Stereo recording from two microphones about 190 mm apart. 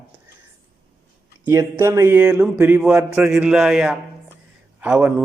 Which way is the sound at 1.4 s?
15° right (ahead or behind).